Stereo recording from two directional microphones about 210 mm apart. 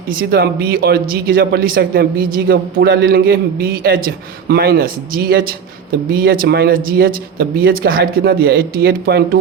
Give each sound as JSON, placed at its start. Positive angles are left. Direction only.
{"t": 0.1, "sound": "speech", "side_deg": -45}